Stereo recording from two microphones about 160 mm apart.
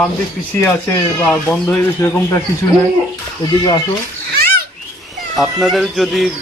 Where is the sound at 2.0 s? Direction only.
20° left (ahead or behind).